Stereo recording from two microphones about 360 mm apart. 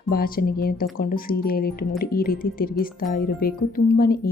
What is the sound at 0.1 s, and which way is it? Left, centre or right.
A woman's voice, left.